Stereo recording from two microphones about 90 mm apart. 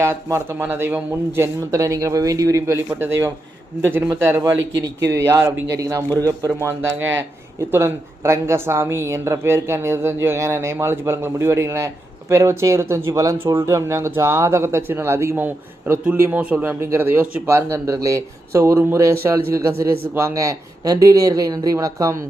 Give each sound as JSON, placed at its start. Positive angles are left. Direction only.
{"t": 0.0, "sound": "speech", "side_deg": -30}
{"t": 1.7, "sound": "speech", "side_deg": -40}
{"t": 4.2, "sound": "speech", "side_deg": -25}
{"t": 4.9, "sound": "a man's voice", "side_deg": -35}
{"t": 16.8, "sound": "speech", "side_deg": -25}